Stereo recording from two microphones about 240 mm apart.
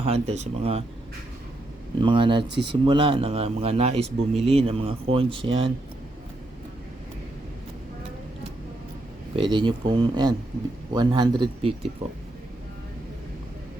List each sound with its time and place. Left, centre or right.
0.0 s a man's voice: right
2.0 s a man's voice: right
9.3 s a man's voice: right